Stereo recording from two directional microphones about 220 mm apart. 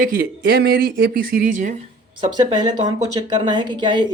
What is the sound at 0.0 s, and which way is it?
Speech, 40° right (ahead or behind).